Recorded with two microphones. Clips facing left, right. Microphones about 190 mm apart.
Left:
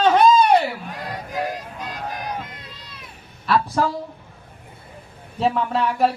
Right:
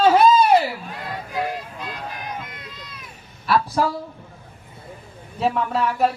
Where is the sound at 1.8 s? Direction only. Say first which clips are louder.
Left 2 dB; 40° left (ahead or behind).